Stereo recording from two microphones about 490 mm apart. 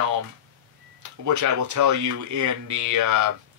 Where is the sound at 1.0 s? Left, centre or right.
Right.